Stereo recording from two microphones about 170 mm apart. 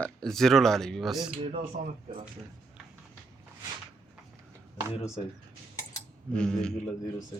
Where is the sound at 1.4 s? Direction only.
45° right (ahead or behind).